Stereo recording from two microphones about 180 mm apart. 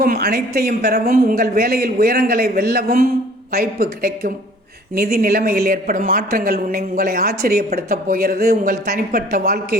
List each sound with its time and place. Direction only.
0.0 s a woman's voice: 60° right (ahead or behind)